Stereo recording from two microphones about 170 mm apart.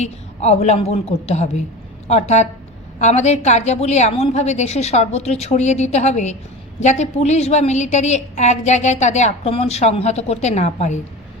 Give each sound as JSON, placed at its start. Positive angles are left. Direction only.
{"t": 0.0, "sound": "a woman's voice", "side_deg": 40}